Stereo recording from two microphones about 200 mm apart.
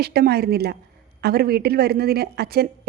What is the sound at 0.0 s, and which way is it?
A woman's voice, 55° right (ahead or behind).